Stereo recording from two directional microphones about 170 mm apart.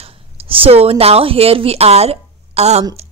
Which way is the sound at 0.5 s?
35° right (ahead or behind).